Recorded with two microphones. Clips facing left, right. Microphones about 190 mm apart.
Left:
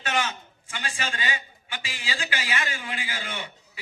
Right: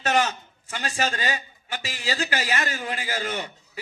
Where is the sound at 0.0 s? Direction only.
40° right (ahead or behind).